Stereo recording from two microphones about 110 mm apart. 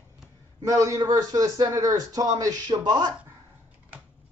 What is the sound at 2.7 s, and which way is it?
Speech, 45° right (ahead or behind).